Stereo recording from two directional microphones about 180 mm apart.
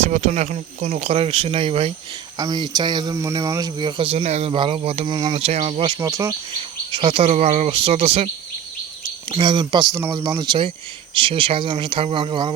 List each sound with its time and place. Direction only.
0.0 s speech: 40° right (ahead or behind)
6.0 s speech: 15° right (ahead or behind)
6.6 s speech: 30° right (ahead or behind)
9.3 s speech: 25° right (ahead or behind)
9.9 s speech: 10° right (ahead or behind); by 12.5 s 30° right (ahead or behind)